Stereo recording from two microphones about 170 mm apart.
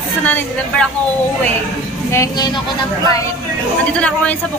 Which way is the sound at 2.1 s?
20° left (ahead or behind).